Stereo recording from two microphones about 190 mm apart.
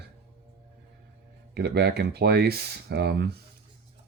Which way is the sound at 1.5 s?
60° right (ahead or behind).